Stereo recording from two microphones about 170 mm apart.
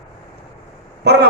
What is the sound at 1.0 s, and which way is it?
Speech, 75° right (ahead or behind).